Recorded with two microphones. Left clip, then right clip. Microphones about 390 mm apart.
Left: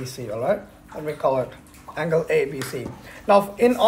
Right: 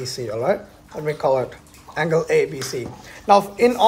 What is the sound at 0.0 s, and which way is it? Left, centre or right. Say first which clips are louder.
Speech: right 3 dB; right.